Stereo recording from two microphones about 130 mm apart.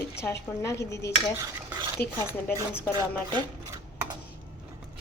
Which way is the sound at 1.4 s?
30° right (ahead or behind).